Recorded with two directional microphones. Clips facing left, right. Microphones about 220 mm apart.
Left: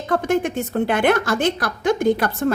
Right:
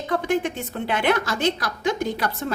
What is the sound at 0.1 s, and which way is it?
A woman's voice, 45° left (ahead or behind).